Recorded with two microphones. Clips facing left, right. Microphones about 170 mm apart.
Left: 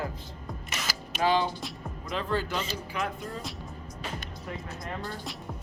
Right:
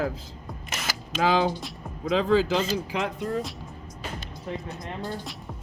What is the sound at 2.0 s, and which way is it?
Speech, 90° right.